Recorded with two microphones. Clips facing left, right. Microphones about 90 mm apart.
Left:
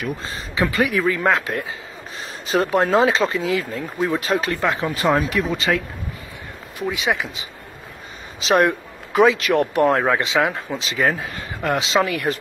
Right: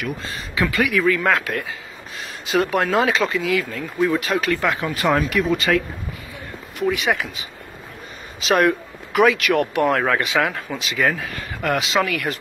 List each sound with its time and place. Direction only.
0.0 s speech: 35° left (ahead or behind)
2.4 s speech: 35° left (ahead or behind)
6.8 s speech: 20° left (ahead or behind)
8.5 s speech: 30° left (ahead or behind)